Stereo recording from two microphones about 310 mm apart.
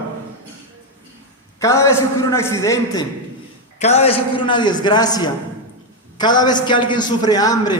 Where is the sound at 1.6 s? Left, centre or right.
Centre.